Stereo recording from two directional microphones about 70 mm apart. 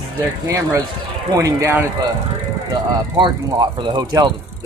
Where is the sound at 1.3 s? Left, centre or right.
Right.